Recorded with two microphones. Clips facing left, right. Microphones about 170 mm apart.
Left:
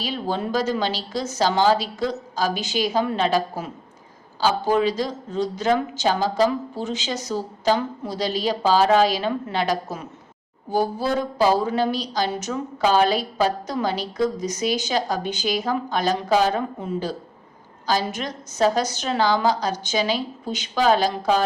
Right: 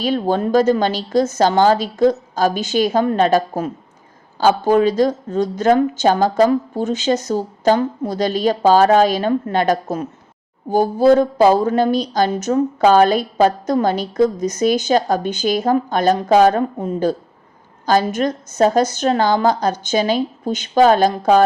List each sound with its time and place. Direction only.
0.0 s speech: 50° right (ahead or behind)